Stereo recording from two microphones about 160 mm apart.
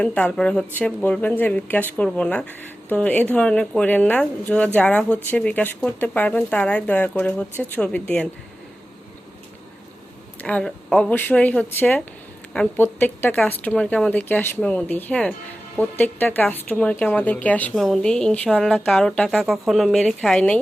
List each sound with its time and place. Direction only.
0.0 s a woman's voice: 10° left (ahead or behind)
10.4 s a woman's voice: 5° left (ahead or behind)